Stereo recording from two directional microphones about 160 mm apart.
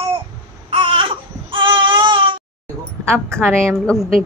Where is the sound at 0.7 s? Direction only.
35° right (ahead or behind).